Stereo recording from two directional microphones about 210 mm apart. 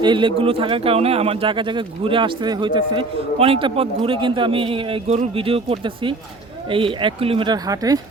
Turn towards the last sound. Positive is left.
turn(degrees=-15)  # may be behind; listen again after turning